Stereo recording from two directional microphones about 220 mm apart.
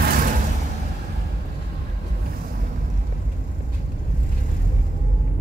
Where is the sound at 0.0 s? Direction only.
40° right (ahead or behind).